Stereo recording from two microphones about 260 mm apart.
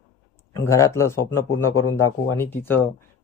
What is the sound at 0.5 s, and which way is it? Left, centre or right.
Speech, centre.